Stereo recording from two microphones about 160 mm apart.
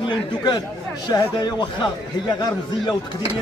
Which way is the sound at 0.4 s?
30° left (ahead or behind).